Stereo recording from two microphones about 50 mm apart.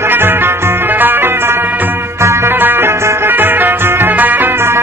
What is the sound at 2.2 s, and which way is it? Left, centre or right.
Music, right.